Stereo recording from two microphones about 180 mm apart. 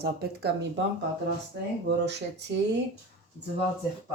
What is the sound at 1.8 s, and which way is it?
Speech, 75° right (ahead or behind).